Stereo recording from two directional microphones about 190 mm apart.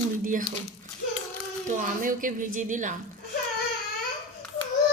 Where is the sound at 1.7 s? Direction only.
45° right (ahead or behind).